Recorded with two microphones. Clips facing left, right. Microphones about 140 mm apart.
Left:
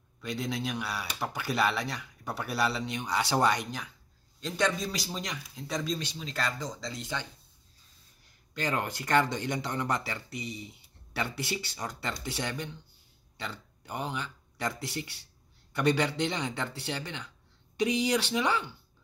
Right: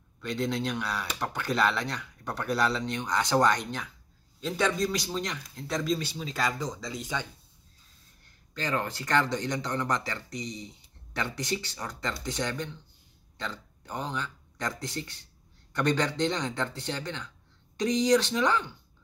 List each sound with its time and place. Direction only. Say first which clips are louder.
0.2 s speech: right 3 dB; 5° left (ahead or behind)
8.5 s speech: right 1 dB; 15° left (ahead or behind)